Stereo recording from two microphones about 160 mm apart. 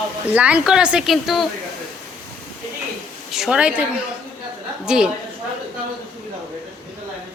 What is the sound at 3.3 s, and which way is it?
Speech, 5° right (ahead or behind).